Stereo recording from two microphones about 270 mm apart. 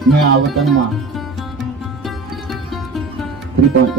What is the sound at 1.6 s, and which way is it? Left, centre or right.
Music, centre.